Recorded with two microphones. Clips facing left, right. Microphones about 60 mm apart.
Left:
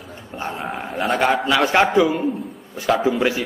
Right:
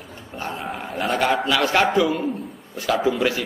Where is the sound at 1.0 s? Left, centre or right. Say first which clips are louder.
Left 2 dB; left.